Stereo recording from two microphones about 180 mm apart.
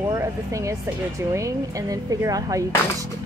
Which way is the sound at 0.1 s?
15° right (ahead or behind).